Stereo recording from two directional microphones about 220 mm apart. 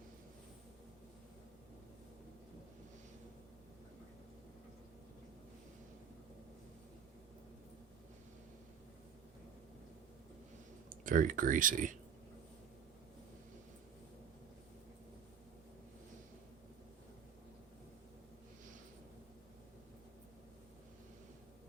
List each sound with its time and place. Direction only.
10.8 s speech: 40° right (ahead or behind)